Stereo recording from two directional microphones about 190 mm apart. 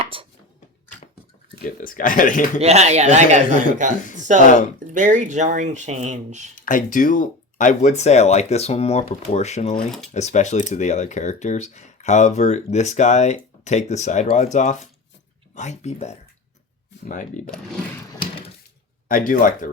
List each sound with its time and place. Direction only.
1.6 s speech: 45° left (ahead or behind)
2.6 s speech: 35° right (ahead or behind)
6.6 s speech: 45° left (ahead or behind)
19.0 s speech: 45° left (ahead or behind)